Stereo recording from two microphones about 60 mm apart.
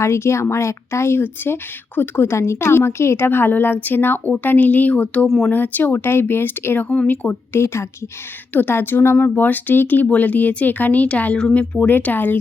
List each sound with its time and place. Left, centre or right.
0.0 s a woman's voice: left
7.5 s speech: left
8.5 s a woman's voice: left
11.8 s a woman's voice: left